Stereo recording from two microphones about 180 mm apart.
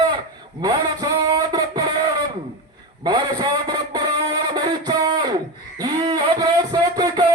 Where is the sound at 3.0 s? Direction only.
25° right (ahead or behind).